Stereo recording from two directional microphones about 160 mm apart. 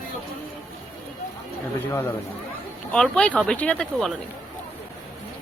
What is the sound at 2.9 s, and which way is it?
A woman's voice, 5° left (ahead or behind).